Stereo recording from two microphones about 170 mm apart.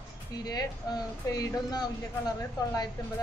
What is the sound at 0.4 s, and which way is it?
A woman's voice, 25° left (ahead or behind).